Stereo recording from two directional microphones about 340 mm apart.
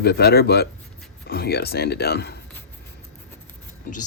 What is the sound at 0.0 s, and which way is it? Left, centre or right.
Speech, left.